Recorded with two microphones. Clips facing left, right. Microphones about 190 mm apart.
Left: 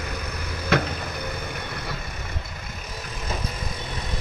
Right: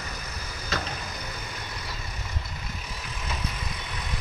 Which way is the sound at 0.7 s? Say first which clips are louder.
Left 10 dB; 60° left (ahead or behind).